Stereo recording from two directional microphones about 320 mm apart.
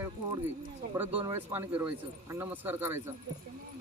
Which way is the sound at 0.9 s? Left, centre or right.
Centre.